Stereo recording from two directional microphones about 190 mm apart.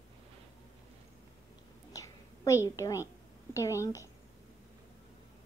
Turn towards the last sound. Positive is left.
turn(degrees=15)  # may be behind; listen again after turning